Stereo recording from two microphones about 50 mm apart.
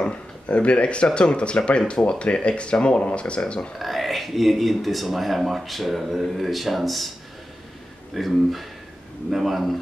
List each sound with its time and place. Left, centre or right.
0.0 s speech: left
3.7 s speech: centre
8.1 s speech: centre